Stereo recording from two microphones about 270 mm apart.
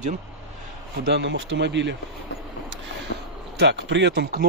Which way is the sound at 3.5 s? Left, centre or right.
Right.